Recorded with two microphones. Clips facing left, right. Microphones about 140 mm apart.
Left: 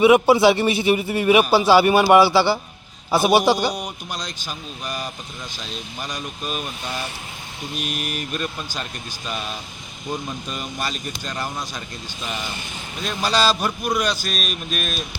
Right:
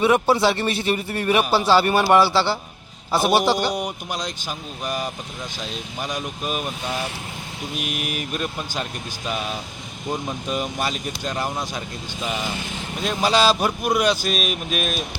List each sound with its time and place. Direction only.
0.0 s a man's voice: 10° left (ahead or behind)
3.7 s speech: 5° right (ahead or behind)
4.2 s speech: 15° right (ahead or behind)
6.1 s speech: 10° right (ahead or behind)
7.8 s speech: 10° right (ahead or behind)
13.0 s speech: 20° right (ahead or behind)